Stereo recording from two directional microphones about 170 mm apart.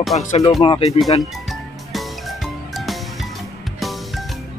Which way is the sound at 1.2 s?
Centre (ahead or behind).